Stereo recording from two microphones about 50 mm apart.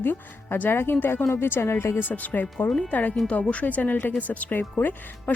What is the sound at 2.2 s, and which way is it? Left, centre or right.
Speech, left.